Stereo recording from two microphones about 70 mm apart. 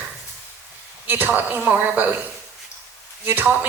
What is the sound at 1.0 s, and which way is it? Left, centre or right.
A woman's voice, right.